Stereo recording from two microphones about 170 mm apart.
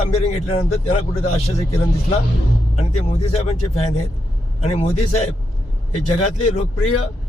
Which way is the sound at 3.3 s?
35° left (ahead or behind).